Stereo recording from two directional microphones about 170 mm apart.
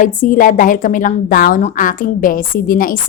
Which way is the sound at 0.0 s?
50° left (ahead or behind).